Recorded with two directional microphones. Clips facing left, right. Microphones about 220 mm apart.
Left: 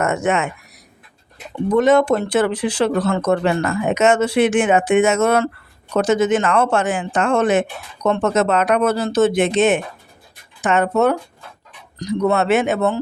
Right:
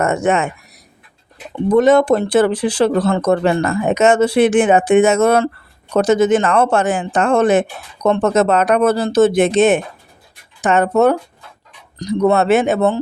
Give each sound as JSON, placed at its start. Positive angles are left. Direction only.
{"t": 0.0, "sound": "speech", "side_deg": -35}
{"t": 1.7, "sound": "speech", "side_deg": -35}